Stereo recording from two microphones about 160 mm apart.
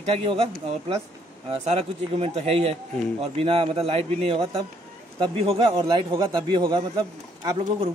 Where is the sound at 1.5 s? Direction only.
40° right (ahead or behind).